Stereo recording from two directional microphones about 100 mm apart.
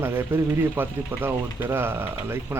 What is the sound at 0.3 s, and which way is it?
Speech, 20° right (ahead or behind).